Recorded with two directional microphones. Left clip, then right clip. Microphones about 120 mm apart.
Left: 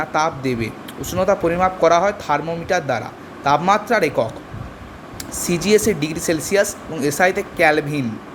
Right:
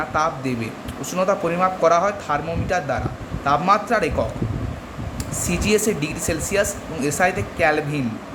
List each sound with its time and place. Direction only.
0.0 s speech: 40° left (ahead or behind)
5.4 s speech: 40° left (ahead or behind)